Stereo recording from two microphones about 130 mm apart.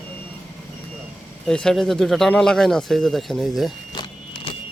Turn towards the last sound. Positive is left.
turn(degrees=0)  # may be behind; listen again after turning